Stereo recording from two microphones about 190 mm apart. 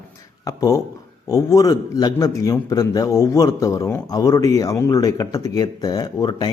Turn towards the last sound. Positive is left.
turn(degrees=20)  # may be behind; listen again after turning